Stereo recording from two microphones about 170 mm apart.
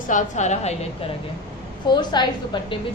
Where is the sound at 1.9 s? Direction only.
25° left (ahead or behind).